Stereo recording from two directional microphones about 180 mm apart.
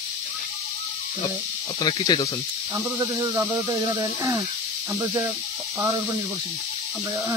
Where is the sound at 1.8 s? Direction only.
20° left (ahead or behind).